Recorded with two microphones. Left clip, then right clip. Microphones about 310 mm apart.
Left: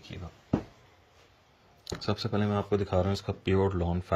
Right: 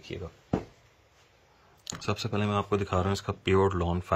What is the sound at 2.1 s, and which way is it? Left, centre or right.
Speech, centre.